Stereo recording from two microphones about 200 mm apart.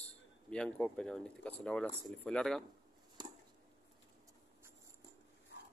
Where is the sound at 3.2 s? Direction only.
20° right (ahead or behind).